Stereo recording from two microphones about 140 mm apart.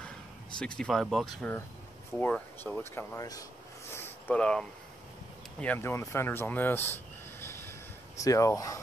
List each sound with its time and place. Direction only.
0.6 s speech: 5° left (ahead or behind)
2.1 s speech: 15° left (ahead or behind)
3.9 s a sound: 15° left (ahead or behind)
4.4 s speech: 5° left (ahead or behind); by 8.7 s 25° left (ahead or behind)